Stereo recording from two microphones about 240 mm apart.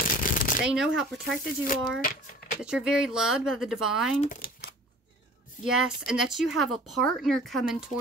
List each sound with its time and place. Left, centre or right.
0.0 s shuffling cards: left
0.7 s speech: centre
1.4 s speech: left
2.6 s speech: centre
4.2 s speech: left
5.7 s speech: centre